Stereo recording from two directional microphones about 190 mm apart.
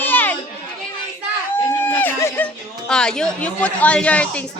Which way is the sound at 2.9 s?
5° left (ahead or behind).